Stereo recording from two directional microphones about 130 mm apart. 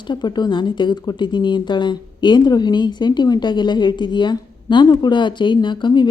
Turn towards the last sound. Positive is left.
turn(degrees=35)  # may be behind; listen again after turning